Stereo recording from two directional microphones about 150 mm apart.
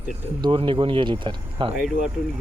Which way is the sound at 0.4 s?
35° right (ahead or behind).